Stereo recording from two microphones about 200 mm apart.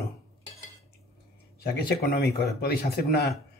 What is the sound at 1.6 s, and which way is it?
Speech, 55° left (ahead or behind).